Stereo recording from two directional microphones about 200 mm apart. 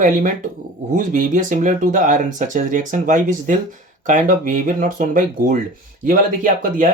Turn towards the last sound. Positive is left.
turn(degrees=-45)  # may be behind; listen again after turning